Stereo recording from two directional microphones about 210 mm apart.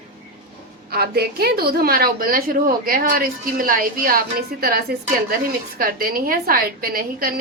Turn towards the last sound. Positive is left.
turn(degrees=-45)  # may be behind; listen again after turning